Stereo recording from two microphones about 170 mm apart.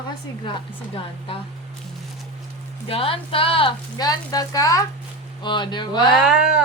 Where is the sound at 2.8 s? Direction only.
35° left (ahead or behind).